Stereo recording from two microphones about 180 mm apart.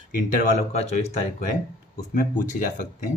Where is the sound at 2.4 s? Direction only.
45° left (ahead or behind).